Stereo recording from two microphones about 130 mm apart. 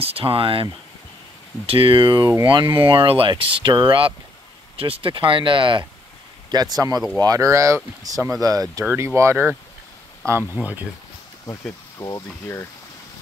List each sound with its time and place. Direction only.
0.0 s speech: 45° right (ahead or behind)
1.7 s speech: 45° right (ahead or behind); by 10.6 s 20° right (ahead or behind)
12.0 s speech: 20° left (ahead or behind)